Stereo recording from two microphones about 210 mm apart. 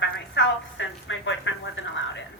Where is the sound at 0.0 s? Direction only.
55° left (ahead or behind).